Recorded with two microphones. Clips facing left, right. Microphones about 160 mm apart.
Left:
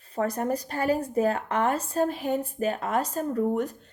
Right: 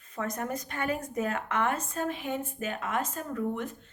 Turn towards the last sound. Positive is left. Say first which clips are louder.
# left 6 dB
turn(degrees=40)  # may be behind; listen again after turning